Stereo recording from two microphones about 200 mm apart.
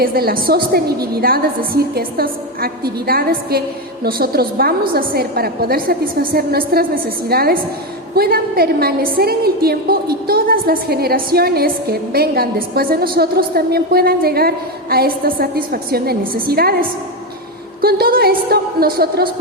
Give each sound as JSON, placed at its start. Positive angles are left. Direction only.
{"t": 0.0, "sound": "a woman's voice", "side_deg": -50}
{"t": 17.7, "sound": "a woman's voice", "side_deg": -50}